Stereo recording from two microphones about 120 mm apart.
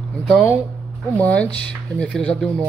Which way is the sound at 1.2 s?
10° left (ahead or behind).